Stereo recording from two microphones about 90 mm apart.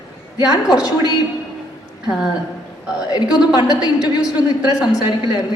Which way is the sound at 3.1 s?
45° left (ahead or behind).